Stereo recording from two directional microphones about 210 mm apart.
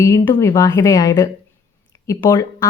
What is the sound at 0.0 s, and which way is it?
A woman's voice, 15° left (ahead or behind).